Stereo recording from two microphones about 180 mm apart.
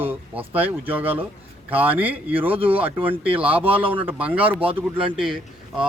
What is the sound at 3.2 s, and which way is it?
Speech, 30° right (ahead or behind).